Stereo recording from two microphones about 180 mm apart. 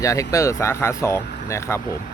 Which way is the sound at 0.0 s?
15° left (ahead or behind).